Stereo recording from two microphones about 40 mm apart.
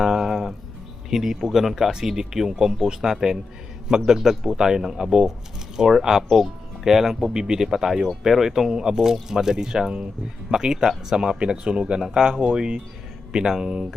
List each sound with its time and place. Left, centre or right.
0.0 s music: centre
1.1 s speech: centre